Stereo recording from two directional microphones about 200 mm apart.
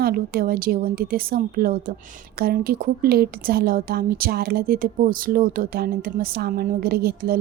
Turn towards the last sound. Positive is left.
turn(degrees=-50)  # may be behind; listen again after turning